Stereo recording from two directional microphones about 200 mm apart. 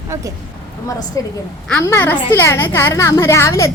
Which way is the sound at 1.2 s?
15° left (ahead or behind).